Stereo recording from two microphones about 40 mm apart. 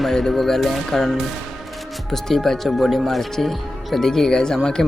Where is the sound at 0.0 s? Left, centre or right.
Centre.